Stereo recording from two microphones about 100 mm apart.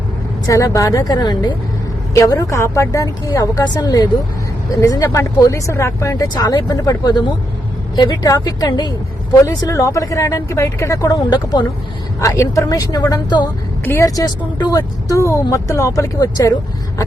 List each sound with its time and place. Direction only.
0.4 s speech: 35° left (ahead or behind)
2.1 s speech: 35° left (ahead or behind)
6.2 s speech: 40° left (ahead or behind)
12.2 s speech: 30° left (ahead or behind)
13.8 s speech: 20° left (ahead or behind)
14.2 s speech: 40° left (ahead or behind)